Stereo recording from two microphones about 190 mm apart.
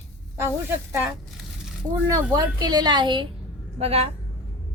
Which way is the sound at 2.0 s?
20° right (ahead or behind).